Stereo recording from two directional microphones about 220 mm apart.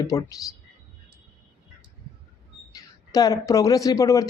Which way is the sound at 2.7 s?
15° left (ahead or behind).